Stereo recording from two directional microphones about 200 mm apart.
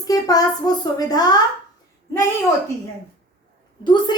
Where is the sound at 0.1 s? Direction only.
20° left (ahead or behind).